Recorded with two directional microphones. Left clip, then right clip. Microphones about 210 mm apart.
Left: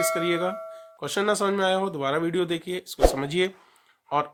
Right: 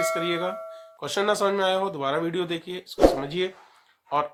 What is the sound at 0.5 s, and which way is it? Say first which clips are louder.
Music: even; centre (ahead or behind).